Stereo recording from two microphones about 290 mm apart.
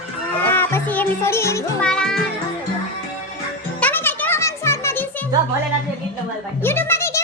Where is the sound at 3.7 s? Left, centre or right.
Centre.